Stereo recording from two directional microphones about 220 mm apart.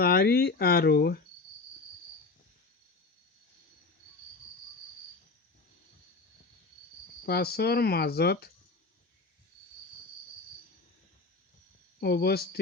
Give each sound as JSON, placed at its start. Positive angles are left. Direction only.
{"t": 0.0, "sound": "speech", "side_deg": 45}
{"t": 7.3, "sound": "speech", "side_deg": 45}
{"t": 11.9, "sound": "speech", "side_deg": 45}